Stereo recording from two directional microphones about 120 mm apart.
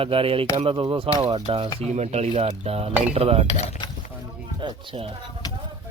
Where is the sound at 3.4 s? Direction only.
65° left (ahead or behind).